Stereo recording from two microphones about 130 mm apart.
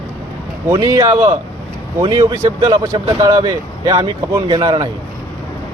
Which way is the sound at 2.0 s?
35° right (ahead or behind).